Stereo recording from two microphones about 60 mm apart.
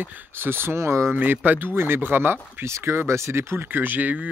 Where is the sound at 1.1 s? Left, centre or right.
Right.